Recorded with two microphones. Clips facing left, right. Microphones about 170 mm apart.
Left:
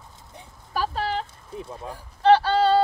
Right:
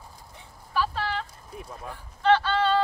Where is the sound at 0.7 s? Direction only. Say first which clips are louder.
Left 2 dB; 40° left (ahead or behind).